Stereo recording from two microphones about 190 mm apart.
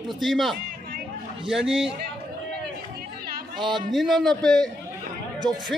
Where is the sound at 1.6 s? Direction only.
30° right (ahead or behind).